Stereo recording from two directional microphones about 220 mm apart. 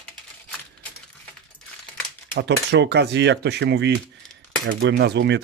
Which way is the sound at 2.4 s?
50° right (ahead or behind).